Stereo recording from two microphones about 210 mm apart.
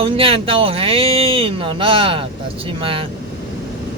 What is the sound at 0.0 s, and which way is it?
Speech, 25° right (ahead or behind).